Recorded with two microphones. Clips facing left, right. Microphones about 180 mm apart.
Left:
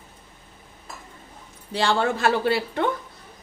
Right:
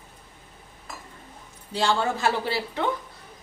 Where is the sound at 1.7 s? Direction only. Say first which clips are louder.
Left 2 dB; 65° left (ahead or behind).